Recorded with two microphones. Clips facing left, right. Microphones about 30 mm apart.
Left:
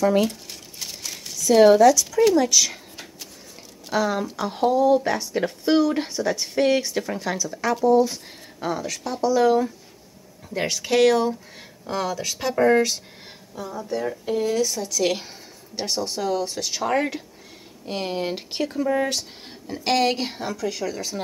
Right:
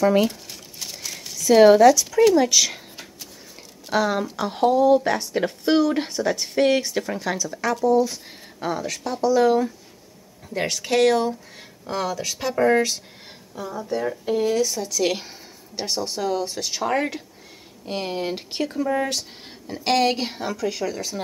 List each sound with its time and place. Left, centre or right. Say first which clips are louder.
0.0 s crumpling: right 1 dB; centre
1.5 s speech: right 1 dB; centre
3.9 s speech: right 1 dB; centre
7.7 s speech: left 1 dB; centre
8.5 s speech: right 1 dB; centre